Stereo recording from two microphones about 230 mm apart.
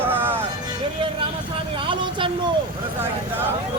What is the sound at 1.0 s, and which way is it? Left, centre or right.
Vehicle, right.